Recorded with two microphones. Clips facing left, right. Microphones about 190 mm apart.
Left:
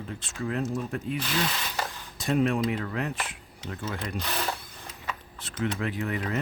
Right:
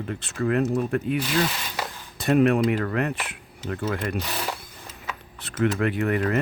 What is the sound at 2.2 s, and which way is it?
Speech, 65° right (ahead or behind).